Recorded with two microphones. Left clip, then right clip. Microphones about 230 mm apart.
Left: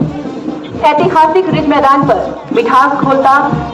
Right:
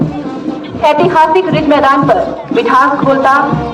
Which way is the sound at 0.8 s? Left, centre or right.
Right.